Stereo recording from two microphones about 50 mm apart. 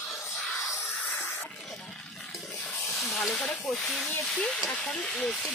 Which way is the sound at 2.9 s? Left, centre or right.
Centre.